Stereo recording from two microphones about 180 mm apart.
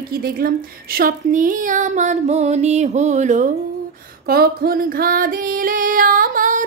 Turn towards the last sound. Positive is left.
turn(degrees=-45)  # may be behind; listen again after turning